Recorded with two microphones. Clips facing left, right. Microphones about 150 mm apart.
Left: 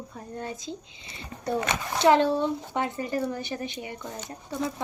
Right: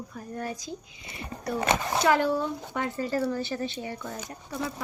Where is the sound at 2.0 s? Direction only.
25° left (ahead or behind).